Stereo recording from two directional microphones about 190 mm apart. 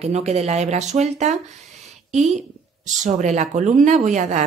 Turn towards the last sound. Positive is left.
turn(degrees=-40)  # may be behind; listen again after turning